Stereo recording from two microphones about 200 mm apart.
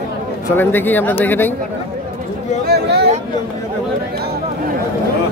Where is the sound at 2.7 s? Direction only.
50° right (ahead or behind).